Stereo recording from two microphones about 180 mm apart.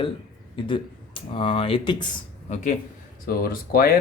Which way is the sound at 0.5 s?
30° left (ahead or behind).